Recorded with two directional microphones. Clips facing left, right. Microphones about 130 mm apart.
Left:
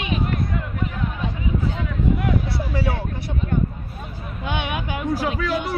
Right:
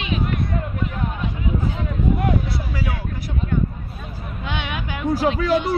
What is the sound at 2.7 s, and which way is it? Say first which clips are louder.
Vehicle: left 4 dB; 30° left (ahead or behind).